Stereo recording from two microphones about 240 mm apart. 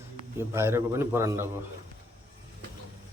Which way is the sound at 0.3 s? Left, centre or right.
Centre.